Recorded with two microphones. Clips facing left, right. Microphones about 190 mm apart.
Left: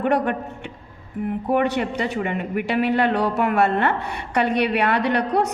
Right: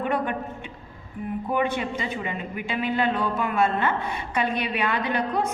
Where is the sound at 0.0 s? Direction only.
70° left (ahead or behind).